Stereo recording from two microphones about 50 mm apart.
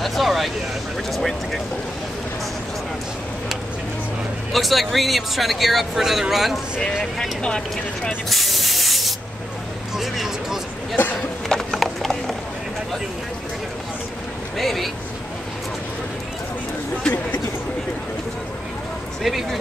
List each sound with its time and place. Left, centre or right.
0.0 s speech: centre
4.5 s speech: centre
7.4 s speech: centre
8.3 s spray: centre
9.9 s a sound: centre
11.7 s horse: centre
14.6 s speech: centre
19.2 s speech: centre